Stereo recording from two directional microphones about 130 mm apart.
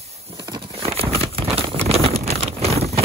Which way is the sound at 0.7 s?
45° right (ahead or behind).